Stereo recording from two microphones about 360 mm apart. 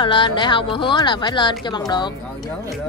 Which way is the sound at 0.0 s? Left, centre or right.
Centre.